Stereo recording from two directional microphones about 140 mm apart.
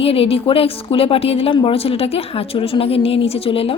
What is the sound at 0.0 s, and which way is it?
A woman's voice, 45° left (ahead or behind).